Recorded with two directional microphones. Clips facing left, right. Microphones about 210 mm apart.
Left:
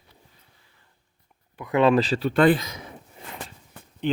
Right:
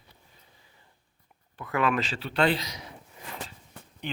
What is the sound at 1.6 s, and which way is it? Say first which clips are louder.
Speech: left 8 dB; 20° left (ahead or behind).